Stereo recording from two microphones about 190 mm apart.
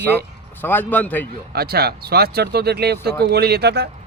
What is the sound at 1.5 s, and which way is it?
Speech, 55° right (ahead or behind).